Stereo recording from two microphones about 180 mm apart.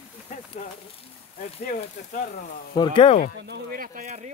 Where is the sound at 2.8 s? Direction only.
25° left (ahead or behind).